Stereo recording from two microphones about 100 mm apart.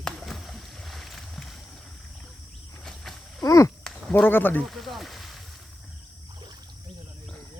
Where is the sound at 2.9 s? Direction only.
5° left (ahead or behind).